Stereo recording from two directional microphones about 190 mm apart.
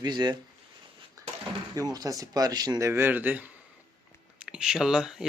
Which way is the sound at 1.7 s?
20° right (ahead or behind).